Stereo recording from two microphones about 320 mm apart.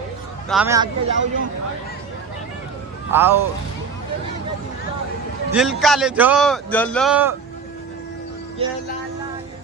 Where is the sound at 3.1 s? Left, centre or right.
Centre.